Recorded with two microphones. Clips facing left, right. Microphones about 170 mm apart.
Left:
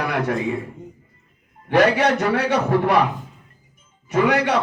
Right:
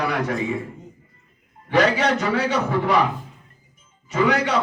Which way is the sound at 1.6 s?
60° left (ahead or behind).